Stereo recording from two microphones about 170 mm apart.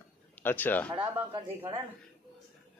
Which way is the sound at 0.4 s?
10° left (ahead or behind).